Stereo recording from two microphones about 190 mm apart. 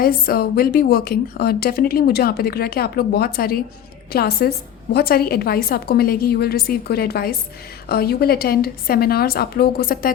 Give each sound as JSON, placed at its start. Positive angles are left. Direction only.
{"t": 0.0, "sound": "a woman's voice", "side_deg": 50}